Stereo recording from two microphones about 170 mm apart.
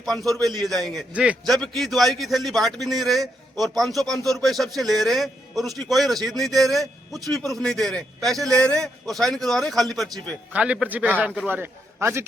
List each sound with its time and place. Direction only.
0.0 s a man's voice: centre (ahead or behind); by 12.2 s 15° right (ahead or behind)